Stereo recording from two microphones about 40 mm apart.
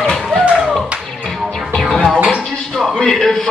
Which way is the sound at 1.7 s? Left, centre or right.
Centre.